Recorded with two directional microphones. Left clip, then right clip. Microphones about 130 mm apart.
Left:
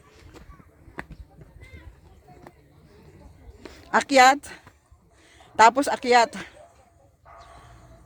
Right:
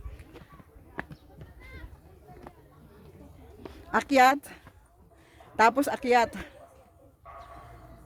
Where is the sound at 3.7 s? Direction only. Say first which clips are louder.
Left 5 dB; 35° left (ahead or behind).